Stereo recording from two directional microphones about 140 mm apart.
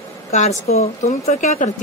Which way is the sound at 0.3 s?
55° left (ahead or behind).